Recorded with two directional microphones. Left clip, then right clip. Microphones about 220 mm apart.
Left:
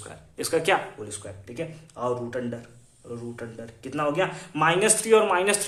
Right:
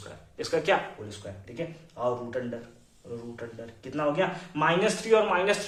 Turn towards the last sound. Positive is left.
turn(degrees=40)  # may be behind; listen again after turning